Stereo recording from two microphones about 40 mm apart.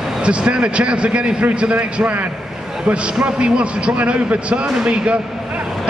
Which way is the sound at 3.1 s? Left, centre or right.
Right.